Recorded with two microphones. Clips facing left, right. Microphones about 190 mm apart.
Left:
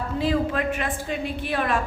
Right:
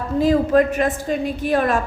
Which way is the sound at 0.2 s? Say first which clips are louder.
Right 9 dB; 40° right (ahead or behind).